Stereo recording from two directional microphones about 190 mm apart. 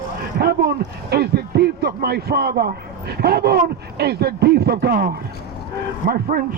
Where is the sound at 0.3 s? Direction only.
55° right (ahead or behind).